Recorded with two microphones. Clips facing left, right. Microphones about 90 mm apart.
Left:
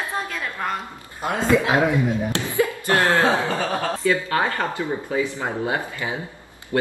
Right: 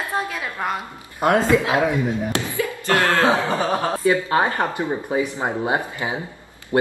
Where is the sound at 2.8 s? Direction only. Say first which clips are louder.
Right 2 dB; 20° left (ahead or behind).